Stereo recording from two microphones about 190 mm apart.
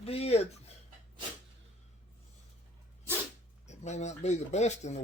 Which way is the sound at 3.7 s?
35° left (ahead or behind).